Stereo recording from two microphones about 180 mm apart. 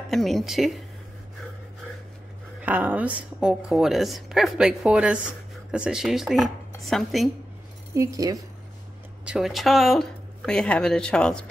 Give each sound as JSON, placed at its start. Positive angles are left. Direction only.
{"t": 0.1, "sound": "a woman's voice", "side_deg": 0}
{"t": 2.6, "sound": "a woman's voice", "side_deg": -10}
{"t": 7.9, "sound": "speech", "side_deg": -20}
{"t": 9.2, "sound": "a woman's voice", "side_deg": -5}